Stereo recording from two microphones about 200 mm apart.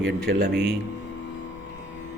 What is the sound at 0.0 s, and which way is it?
Speech, 55° right (ahead or behind).